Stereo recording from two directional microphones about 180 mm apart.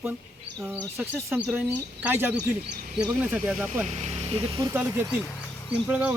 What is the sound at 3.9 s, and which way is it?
Speech, 35° right (ahead or behind).